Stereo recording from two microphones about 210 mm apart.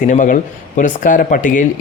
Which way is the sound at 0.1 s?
35° left (ahead or behind).